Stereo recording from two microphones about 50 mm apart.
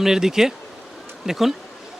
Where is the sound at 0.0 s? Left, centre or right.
Centre.